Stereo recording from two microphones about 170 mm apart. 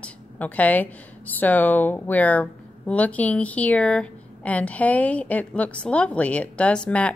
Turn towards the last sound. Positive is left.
turn(degrees=5)  # may be behind; listen again after turning